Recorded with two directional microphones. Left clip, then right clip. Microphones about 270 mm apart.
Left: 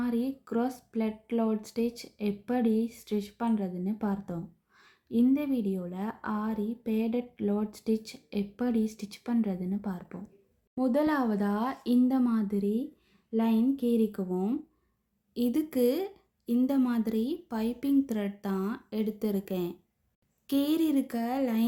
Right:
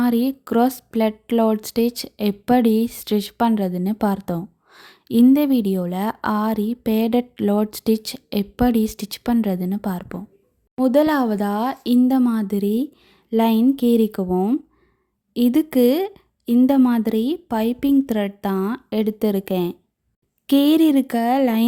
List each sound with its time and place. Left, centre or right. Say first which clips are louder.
0.0 s speech: right 12 dB; right